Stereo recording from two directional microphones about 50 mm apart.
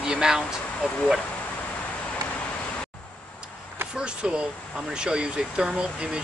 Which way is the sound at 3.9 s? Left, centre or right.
Centre.